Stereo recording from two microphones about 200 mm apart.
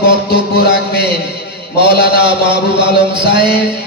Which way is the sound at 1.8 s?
55° left (ahead or behind).